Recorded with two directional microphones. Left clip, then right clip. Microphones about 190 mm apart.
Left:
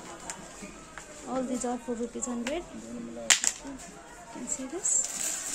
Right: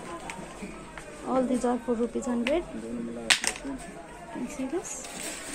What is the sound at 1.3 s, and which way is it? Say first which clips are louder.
Speech: right 6 dB; centre (ahead or behind).